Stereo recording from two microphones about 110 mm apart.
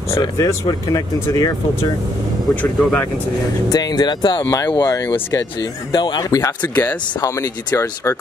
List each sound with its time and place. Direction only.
0.4 s speech: 30° left (ahead or behind)
2.5 s speech: 10° left (ahead or behind)
3.6 s speech: 35° left (ahead or behind)
4.4 s speech: 30° left (ahead or behind)
6.7 s speech: 15° left (ahead or behind)
7.2 s speech: 35° left (ahead or behind)